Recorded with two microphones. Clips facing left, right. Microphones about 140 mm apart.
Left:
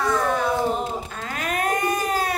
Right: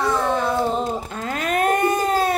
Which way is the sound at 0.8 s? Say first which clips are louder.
Right 4 dB; 35° right (ahead or behind).